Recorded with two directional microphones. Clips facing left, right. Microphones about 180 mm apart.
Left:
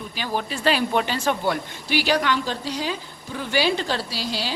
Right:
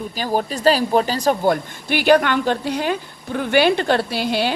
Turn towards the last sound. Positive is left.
turn(degrees=-60)  # may be behind; listen again after turning